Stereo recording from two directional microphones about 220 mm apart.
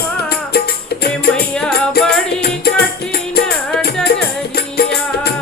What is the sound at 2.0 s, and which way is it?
Music, 45° left (ahead or behind).